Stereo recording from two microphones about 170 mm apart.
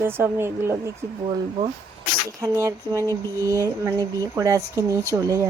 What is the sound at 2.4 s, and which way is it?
Speech, 20° right (ahead or behind).